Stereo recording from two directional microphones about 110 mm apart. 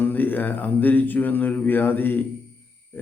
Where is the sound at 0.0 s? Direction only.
15° left (ahead or behind).